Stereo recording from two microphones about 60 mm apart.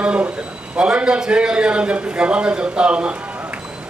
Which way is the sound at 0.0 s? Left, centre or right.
Centre.